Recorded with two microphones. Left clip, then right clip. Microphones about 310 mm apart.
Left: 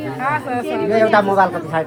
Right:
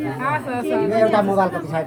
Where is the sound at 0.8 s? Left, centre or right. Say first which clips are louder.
Left 4 dB; left.